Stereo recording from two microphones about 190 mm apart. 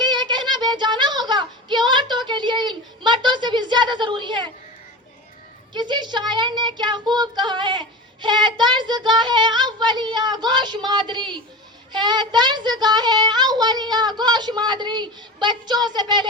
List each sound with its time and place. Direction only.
0.0 s child singing: 25° right (ahead or behind)
5.7 s child singing: 25° right (ahead or behind)